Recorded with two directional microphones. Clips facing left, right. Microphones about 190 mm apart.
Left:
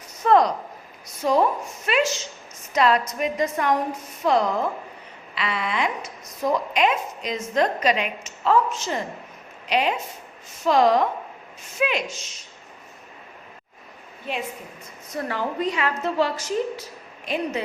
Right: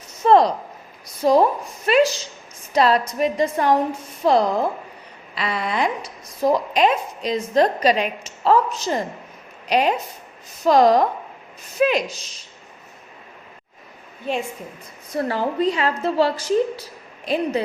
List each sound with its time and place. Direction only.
0.3 s a woman's voice: 30° right (ahead or behind)
15.1 s a woman's voice: 30° right (ahead or behind)